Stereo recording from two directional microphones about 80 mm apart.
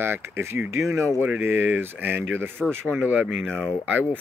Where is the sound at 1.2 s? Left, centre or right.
Right.